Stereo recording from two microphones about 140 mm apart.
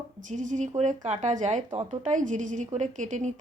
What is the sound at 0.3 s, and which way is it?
A woman's voice, 65° right (ahead or behind).